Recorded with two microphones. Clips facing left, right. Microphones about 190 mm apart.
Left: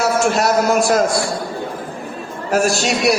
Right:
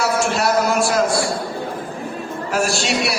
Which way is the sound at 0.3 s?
45° left (ahead or behind).